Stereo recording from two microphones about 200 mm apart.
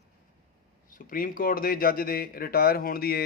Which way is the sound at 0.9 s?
45° left (ahead or behind).